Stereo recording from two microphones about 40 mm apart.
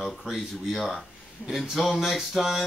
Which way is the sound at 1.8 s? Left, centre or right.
Centre.